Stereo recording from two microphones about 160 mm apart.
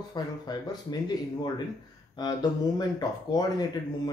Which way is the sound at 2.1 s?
25° left (ahead or behind).